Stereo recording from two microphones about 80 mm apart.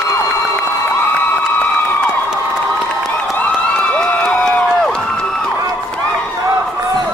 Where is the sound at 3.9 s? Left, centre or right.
Centre.